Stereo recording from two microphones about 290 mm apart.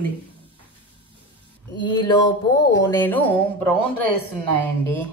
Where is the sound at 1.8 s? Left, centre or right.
Centre.